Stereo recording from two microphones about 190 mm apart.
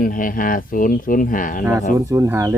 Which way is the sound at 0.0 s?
45° left (ahead or behind).